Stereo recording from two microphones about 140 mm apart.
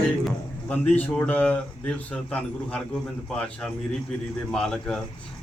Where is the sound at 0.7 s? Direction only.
10° left (ahead or behind).